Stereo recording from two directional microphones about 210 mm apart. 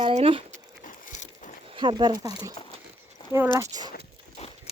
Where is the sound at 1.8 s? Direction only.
20° right (ahead or behind).